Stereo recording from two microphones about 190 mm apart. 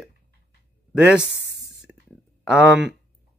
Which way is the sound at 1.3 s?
65° right (ahead or behind).